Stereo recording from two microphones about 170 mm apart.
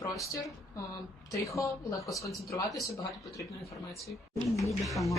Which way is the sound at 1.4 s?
20° left (ahead or behind).